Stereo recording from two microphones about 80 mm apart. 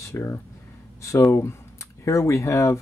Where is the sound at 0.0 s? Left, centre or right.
Left.